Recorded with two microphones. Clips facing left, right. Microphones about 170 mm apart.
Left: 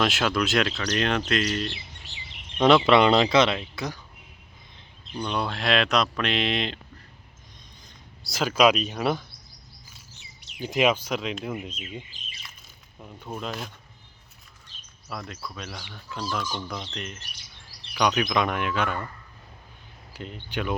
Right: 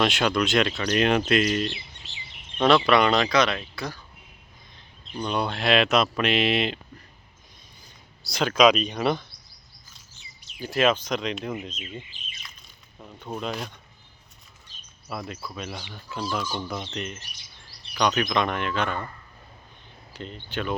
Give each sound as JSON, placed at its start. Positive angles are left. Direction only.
{"t": 0.0, "sound": "speech", "side_deg": 0}
{"t": 0.7, "sound": "speech", "side_deg": -10}
{"t": 2.8, "sound": "speech", "side_deg": 25}
{"t": 5.1, "sound": "speech", "side_deg": -5}
{"t": 8.2, "sound": "speech", "side_deg": 5}
{"t": 10.6, "sound": "speech", "side_deg": 15}
{"t": 12.1, "sound": "speech", "side_deg": 40}
{"t": 13.0, "sound": "speech", "side_deg": 5}
{"t": 15.1, "sound": "speech", "side_deg": -5}
{"t": 20.1, "sound": "speech", "side_deg": 10}